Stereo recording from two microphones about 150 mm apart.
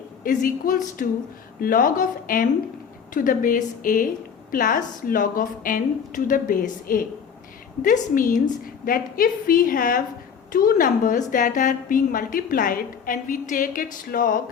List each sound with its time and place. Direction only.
0.2 s a woman's voice: 70° left (ahead or behind)